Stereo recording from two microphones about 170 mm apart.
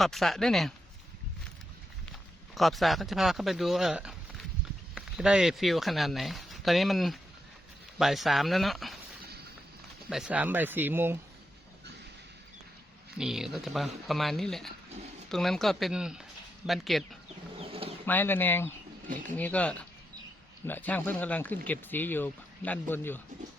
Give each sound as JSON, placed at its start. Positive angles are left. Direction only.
{"t": 0.0, "sound": "speech", "side_deg": 0}
{"t": 2.6, "sound": "speech", "side_deg": 0}
{"t": 10.1, "sound": "speech", "side_deg": -5}
{"t": 13.1, "sound": "speech", "side_deg": -5}
{"t": 17.6, "sound": "bird", "side_deg": -35}
{"t": 18.0, "sound": "speech", "side_deg": 10}